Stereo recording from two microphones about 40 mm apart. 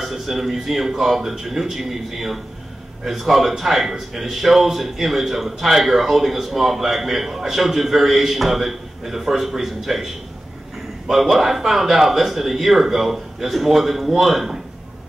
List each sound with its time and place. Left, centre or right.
0.0 s a man's voice: centre
11.1 s a man's voice: centre